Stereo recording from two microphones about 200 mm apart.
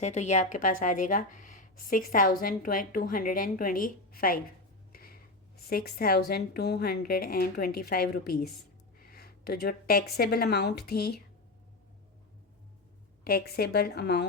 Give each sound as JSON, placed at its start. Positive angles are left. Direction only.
{"t": 0.0, "sound": "speech", "side_deg": 35}
{"t": 4.9, "sound": "a sound", "side_deg": 45}
{"t": 5.6, "sound": "speech", "side_deg": 50}
{"t": 13.2, "sound": "speech", "side_deg": 50}